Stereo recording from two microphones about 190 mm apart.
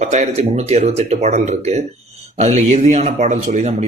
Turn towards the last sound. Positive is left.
turn(degrees=-40)  # may be behind; listen again after turning